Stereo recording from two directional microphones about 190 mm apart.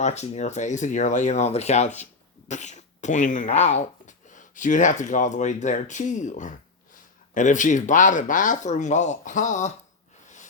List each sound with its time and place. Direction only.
0.0 s speech: 35° left (ahead or behind)
10.2 s snort: 40° left (ahead or behind)